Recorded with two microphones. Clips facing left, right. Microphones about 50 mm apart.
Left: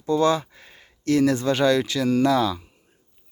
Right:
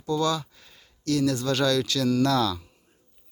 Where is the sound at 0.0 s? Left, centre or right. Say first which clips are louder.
Left 5 dB; left.